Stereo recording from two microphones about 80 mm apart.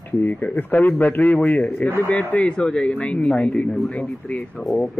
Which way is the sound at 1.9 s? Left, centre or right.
Left.